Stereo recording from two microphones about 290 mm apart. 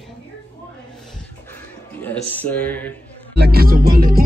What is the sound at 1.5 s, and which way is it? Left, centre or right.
Music, centre.